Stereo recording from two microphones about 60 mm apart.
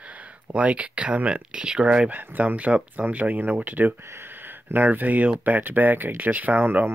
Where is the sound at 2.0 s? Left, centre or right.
Right.